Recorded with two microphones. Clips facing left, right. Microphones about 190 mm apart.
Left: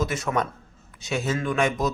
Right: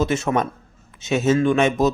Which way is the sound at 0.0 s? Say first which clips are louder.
Right 5 dB; 25° right (ahead or behind).